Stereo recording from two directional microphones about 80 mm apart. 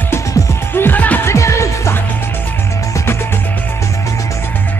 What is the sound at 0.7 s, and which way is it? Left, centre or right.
Music, left.